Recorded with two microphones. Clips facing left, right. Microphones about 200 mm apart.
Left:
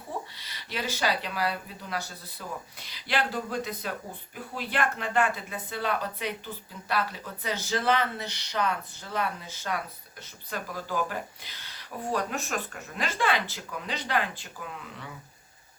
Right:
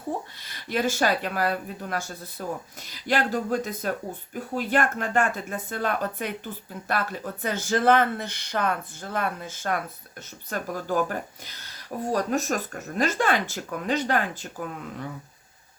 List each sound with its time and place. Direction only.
0.3 s speech: 50° right (ahead or behind)